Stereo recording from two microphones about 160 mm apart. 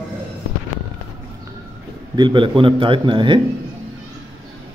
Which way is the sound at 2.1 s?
30° right (ahead or behind).